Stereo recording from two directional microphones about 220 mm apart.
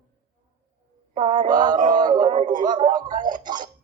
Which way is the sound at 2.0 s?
20° right (ahead or behind).